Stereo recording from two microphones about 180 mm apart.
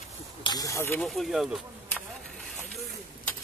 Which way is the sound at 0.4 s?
20° left (ahead or behind).